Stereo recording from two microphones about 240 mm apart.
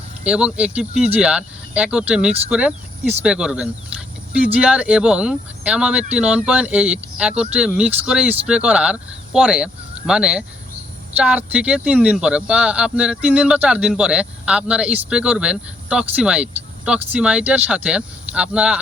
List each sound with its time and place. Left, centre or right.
0.3 s speech: centre